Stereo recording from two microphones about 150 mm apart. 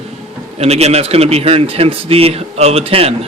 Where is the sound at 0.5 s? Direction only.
45° right (ahead or behind).